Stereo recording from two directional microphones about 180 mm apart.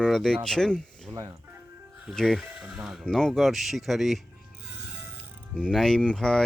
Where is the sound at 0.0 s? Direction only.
Centre (ahead or behind).